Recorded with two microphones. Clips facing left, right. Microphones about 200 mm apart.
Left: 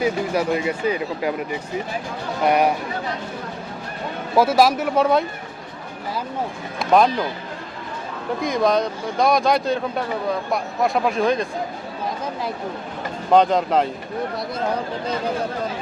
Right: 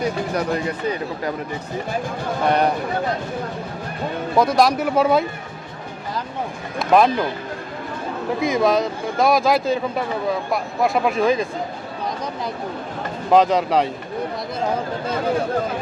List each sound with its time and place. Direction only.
0.0 s speech: 5° left (ahead or behind)
2.5 s speech: 10° left (ahead or behind)
4.4 s speech: 5° left (ahead or behind)
6.7 s speech: centre (ahead or behind)
8.4 s speech: centre (ahead or behind)
13.3 s speech: centre (ahead or behind)